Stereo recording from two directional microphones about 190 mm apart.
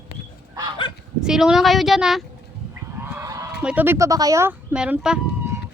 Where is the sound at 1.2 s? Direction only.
5° right (ahead or behind).